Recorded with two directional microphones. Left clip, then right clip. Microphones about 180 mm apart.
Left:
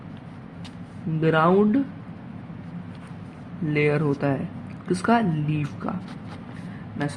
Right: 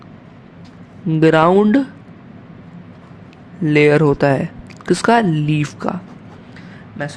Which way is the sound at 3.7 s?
35° right (ahead or behind).